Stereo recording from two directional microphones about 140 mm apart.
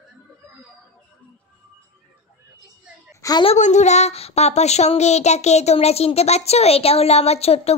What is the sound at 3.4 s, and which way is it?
Speech, 55° left (ahead or behind).